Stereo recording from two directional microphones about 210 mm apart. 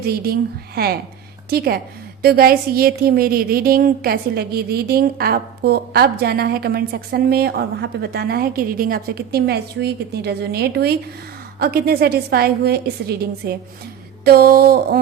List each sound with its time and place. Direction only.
0.0 s a woman's voice: 45° right (ahead or behind)